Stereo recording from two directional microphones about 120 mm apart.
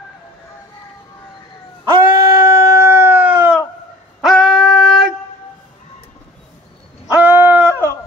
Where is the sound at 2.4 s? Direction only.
25° right (ahead or behind).